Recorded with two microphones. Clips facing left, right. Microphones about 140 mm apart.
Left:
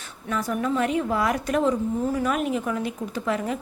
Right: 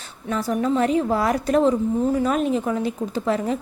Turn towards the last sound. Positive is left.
turn(degrees=-35)  # may be behind; listen again after turning